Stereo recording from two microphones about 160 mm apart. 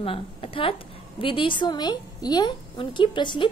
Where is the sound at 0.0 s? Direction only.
35° left (ahead or behind).